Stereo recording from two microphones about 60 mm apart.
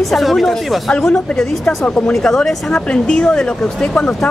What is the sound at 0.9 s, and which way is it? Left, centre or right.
Speech, centre.